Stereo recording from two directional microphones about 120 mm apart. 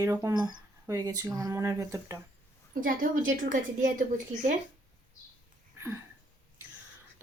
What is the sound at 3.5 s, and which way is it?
A woman's voice, 90° right.